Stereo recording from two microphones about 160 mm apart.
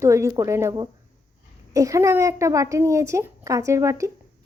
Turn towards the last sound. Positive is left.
turn(degrees=-20)  # may be behind; listen again after turning